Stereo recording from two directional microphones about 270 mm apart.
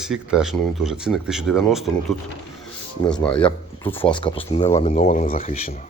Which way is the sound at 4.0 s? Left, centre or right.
Centre.